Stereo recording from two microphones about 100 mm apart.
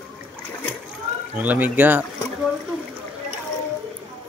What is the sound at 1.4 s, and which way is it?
Speech, 15° right (ahead or behind).